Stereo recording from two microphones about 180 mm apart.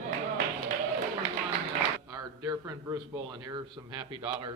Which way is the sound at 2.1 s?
20° right (ahead or behind).